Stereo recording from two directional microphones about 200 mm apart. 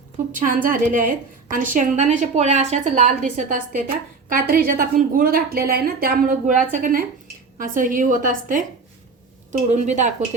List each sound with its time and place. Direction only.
0.3 s a woman's voice: 40° right (ahead or behind)